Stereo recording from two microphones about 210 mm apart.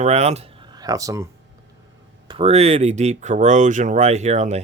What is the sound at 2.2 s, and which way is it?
Speech, 25° right (ahead or behind).